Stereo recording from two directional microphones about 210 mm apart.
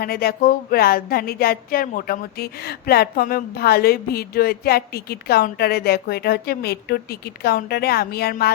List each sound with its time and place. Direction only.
0.0 s speech: 45° left (ahead or behind)